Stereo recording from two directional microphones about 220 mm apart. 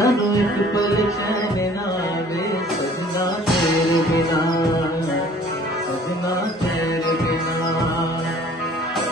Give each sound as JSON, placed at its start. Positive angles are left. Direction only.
{"t": 0.0, "sound": "music", "side_deg": 15}